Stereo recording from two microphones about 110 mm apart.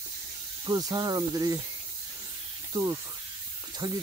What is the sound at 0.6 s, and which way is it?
Speech, 35° right (ahead or behind).